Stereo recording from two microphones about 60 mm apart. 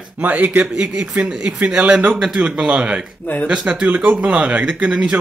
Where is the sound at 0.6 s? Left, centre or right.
Centre.